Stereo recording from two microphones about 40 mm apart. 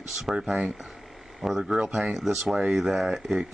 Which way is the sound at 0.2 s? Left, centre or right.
Centre.